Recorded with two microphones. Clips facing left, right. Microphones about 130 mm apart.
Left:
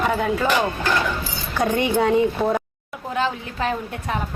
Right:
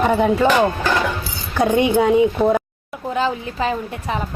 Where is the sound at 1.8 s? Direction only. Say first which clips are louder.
Right 4 dB; 15° right (ahead or behind).